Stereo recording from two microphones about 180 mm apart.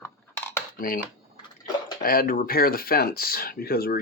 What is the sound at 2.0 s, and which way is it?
Speech, 55° left (ahead or behind).